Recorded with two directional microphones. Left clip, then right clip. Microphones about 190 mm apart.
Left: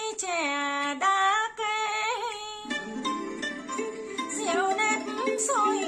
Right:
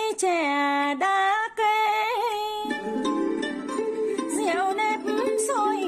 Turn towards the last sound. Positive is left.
turn(degrees=-45)  # may be behind; listen again after turning